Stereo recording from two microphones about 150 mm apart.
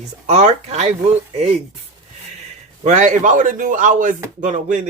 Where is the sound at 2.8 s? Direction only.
55° right (ahead or behind).